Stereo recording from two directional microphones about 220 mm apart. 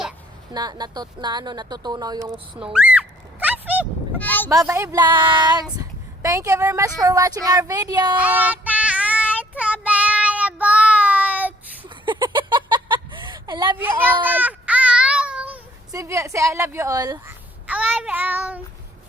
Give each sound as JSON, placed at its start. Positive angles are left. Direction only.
{"t": 0.5, "sound": "speech", "side_deg": -20}
{"t": 2.7, "sound": "speech", "side_deg": -5}
{"t": 3.4, "sound": "a sound", "side_deg": -5}
{"t": 4.2, "sound": "a sound", "side_deg": 10}
{"t": 4.4, "sound": "speech", "side_deg": -10}
{"t": 8.1, "sound": "child singing", "side_deg": -5}
{"t": 12.0, "sound": "a sound", "side_deg": -20}
{"t": 13.7, "sound": "child singing", "side_deg": -10}
{"t": 15.9, "sound": "speech", "side_deg": -15}